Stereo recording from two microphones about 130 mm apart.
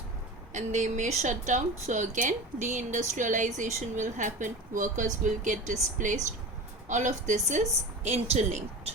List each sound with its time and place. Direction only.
0.5 s a woman's voice: 65° right (ahead or behind)